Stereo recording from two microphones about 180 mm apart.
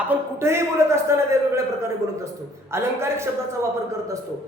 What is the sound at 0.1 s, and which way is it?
A man's voice, 15° right (ahead or behind).